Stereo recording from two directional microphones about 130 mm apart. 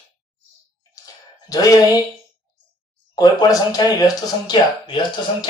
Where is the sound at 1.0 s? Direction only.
30° left (ahead or behind).